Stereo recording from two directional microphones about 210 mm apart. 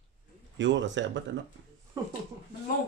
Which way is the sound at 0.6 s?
60° right (ahead or behind).